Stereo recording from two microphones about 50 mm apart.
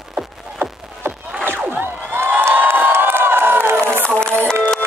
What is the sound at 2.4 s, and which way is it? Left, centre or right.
Crowd, right.